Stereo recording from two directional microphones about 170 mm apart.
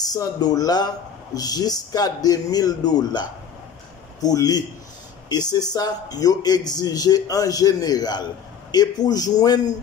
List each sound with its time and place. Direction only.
0.0 s speech: 20° left (ahead or behind)